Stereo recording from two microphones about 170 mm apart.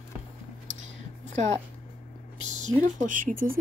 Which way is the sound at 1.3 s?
45° right (ahead or behind).